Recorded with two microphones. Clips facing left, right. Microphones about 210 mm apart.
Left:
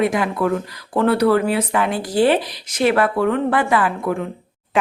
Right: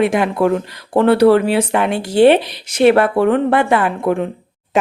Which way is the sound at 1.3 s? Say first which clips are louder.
Right 4 dB; 75° right (ahead or behind).